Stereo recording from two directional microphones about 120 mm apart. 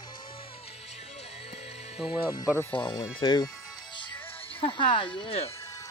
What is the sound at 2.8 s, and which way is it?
Speech, 35° left (ahead or behind).